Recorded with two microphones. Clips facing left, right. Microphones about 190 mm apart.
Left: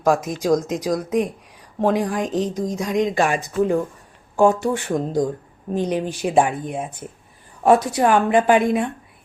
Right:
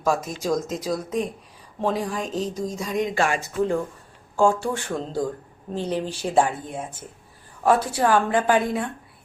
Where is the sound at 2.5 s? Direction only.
15° left (ahead or behind).